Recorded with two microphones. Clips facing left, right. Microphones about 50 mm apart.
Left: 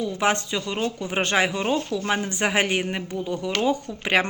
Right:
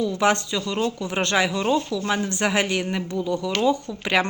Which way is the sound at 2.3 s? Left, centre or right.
Centre.